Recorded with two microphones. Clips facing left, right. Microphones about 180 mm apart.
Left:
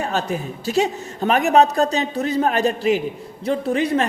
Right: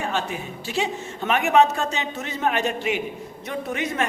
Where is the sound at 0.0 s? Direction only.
40° left (ahead or behind).